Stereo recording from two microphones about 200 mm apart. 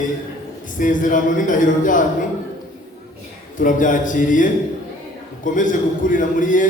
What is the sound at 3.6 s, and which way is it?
Speech, 40° left (ahead or behind).